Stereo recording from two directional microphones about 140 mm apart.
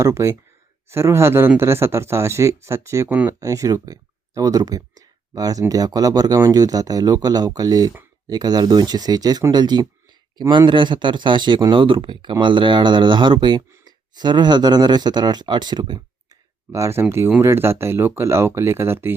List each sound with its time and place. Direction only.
0.0 s speech: 20° right (ahead or behind)
13.7 s a sound: 20° right (ahead or behind)
14.1 s speech: 30° right (ahead or behind)